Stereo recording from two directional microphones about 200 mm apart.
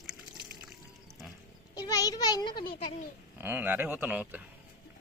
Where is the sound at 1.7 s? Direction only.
20° left (ahead or behind).